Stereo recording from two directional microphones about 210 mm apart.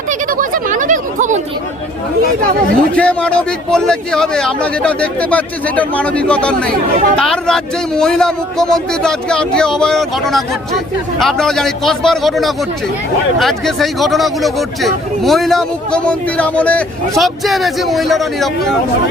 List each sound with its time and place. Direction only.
0.1 s speech: 40° right (ahead or behind)
2.9 s speech: 5° left (ahead or behind)